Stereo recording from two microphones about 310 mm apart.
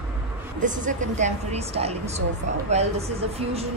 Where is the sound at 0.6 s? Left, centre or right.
Right.